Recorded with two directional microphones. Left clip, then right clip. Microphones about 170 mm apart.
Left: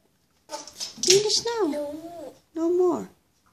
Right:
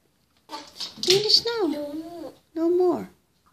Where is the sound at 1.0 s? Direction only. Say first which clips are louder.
Right 1 dB; 5° left (ahead or behind).